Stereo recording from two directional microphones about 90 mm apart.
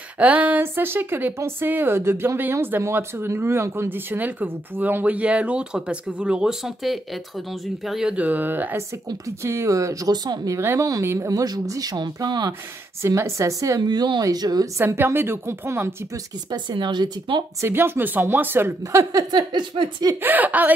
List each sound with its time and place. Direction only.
0.2 s a woman's voice: 15° right (ahead or behind); by 12.5 s 50° right (ahead or behind)
13.0 s speech: 30° right (ahead or behind)
13.8 s speech: 55° right (ahead or behind)
14.8 s a woman's voice: 30° right (ahead or behind)
16.4 s speech: 55° right (ahead or behind)
17.6 s a woman's voice: 25° right (ahead or behind)
19.3 s speech: 55° right (ahead or behind)
20.2 s a woman's voice: 20° right (ahead or behind)